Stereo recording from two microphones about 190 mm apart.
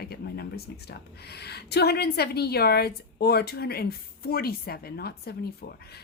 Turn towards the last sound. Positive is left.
turn(degrees=55)  # may be behind; listen again after turning